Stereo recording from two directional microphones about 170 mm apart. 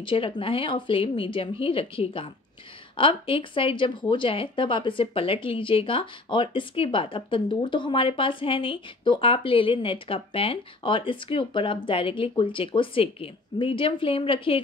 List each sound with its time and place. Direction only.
0.0 s speech: 30° left (ahead or behind)